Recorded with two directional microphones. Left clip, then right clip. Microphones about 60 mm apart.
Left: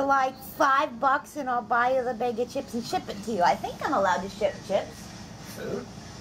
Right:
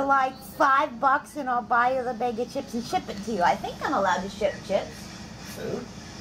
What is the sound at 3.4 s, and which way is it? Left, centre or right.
Speech, centre.